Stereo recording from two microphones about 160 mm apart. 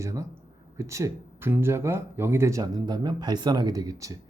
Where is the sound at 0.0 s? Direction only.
20° right (ahead or behind).